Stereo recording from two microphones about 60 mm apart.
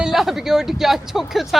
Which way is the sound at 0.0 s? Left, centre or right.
Centre.